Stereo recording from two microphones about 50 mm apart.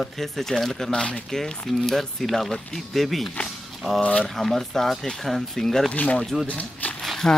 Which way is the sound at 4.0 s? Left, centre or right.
Left.